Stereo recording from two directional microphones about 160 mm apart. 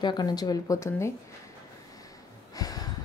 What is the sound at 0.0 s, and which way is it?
Speech, 25° left (ahead or behind).